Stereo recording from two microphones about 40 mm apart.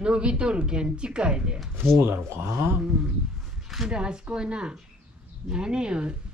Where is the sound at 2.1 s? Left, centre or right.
Right.